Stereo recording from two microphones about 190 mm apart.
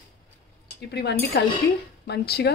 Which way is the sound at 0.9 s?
60° left (ahead or behind).